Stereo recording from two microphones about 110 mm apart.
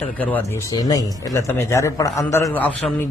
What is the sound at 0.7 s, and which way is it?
Speech, 35° left (ahead or behind).